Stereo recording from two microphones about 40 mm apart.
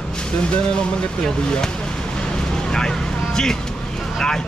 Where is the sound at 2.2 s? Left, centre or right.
Centre.